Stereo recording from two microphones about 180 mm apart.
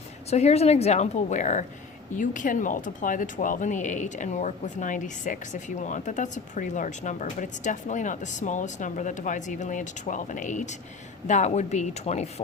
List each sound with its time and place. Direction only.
0.3 s a woman's voice: 35° left (ahead or behind)